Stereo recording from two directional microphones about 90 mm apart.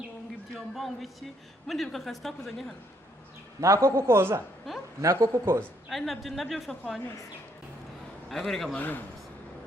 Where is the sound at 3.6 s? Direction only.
35° right (ahead or behind).